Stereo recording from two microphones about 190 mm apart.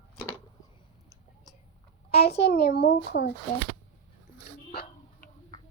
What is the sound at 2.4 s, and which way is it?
Speech, 55° left (ahead or behind).